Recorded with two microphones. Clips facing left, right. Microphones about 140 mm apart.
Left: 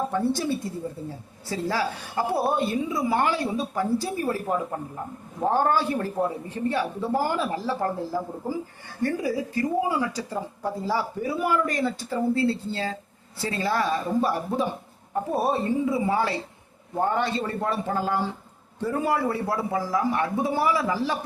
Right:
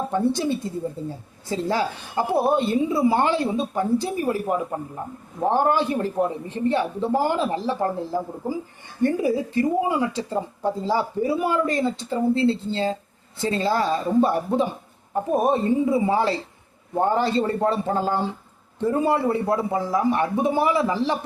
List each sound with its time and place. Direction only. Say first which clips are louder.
0.1 s a woman's voice: right 3 dB; 20° right (ahead or behind)